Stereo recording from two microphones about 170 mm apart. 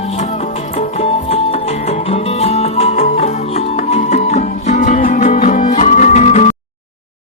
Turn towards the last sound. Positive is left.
turn(degrees=45)  # may be behind; listen again after turning